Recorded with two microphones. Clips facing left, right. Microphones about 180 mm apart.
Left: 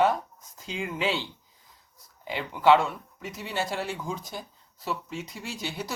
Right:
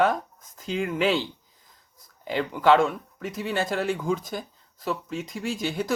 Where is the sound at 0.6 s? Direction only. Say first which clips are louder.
Right 5 dB; 50° right (ahead or behind).